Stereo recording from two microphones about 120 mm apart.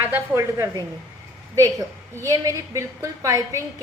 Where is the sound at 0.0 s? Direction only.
20° right (ahead or behind).